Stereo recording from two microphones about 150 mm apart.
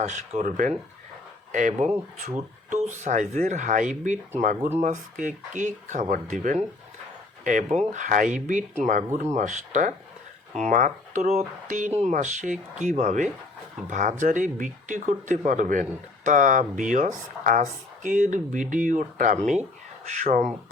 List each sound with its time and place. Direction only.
0.1 s speech: 55° right (ahead or behind)